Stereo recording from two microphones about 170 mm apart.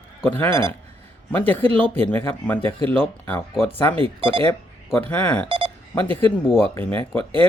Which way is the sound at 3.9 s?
30° right (ahead or behind).